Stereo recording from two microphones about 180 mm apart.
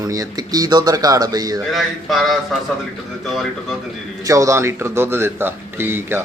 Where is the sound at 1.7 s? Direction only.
Centre (ahead or behind).